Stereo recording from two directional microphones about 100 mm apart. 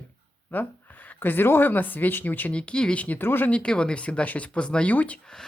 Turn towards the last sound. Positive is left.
turn(degrees=15)  # may be behind; listen again after turning